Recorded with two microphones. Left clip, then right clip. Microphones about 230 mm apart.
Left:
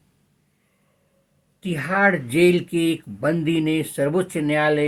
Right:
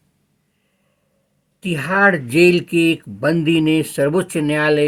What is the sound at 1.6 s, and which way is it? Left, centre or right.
Speech, right.